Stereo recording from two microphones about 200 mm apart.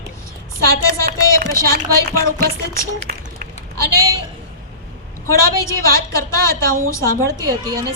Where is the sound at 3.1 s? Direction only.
45° right (ahead or behind).